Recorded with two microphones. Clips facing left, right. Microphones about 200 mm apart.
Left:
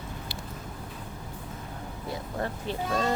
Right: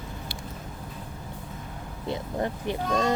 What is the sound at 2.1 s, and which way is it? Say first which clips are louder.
Speech: right 4 dB; 15° right (ahead or behind).